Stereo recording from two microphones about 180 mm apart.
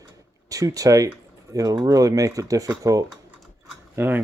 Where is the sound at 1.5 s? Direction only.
20° right (ahead or behind).